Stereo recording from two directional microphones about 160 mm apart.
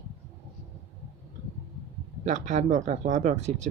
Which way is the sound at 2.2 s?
50° right (ahead or behind).